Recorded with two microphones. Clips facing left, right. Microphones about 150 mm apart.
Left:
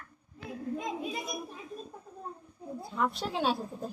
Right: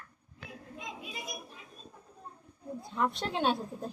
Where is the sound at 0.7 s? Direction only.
40° left (ahead or behind).